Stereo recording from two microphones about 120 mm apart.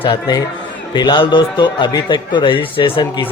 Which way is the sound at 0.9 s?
40° left (ahead or behind).